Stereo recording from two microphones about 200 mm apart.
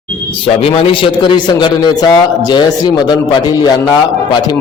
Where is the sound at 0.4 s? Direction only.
25° left (ahead or behind).